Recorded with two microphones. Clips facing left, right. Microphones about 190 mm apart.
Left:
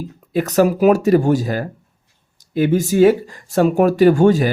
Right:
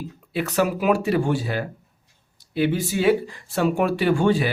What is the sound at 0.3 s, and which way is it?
Speech, 40° left (ahead or behind).